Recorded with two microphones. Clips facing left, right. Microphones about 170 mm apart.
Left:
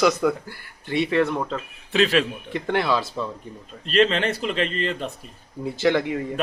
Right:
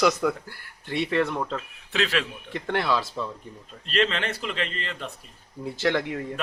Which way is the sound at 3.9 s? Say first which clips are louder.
Left 6 dB; 30° left (ahead or behind).